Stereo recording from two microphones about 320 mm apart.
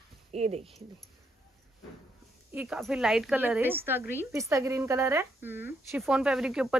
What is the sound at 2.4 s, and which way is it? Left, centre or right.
A woman's voice, centre.